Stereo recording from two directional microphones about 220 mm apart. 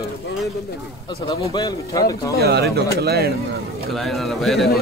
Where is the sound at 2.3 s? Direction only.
45° right (ahead or behind).